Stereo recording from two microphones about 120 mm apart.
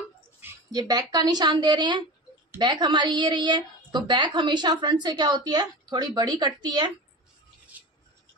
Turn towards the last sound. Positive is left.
turn(degrees=-15)  # may be behind; listen again after turning